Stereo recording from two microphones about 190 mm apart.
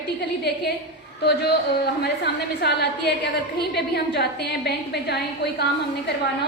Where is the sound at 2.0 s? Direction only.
60° left (ahead or behind).